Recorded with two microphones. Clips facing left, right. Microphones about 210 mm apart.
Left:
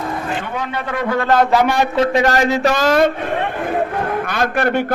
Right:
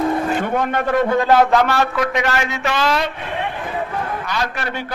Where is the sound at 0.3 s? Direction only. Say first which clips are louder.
Right 4 dB; 45° right (ahead or behind).